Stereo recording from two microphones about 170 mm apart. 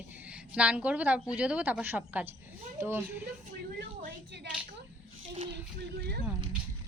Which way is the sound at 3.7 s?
75° right (ahead or behind).